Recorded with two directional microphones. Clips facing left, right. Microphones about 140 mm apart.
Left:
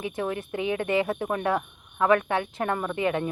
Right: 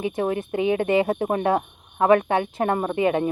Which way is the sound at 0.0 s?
25° right (ahead or behind).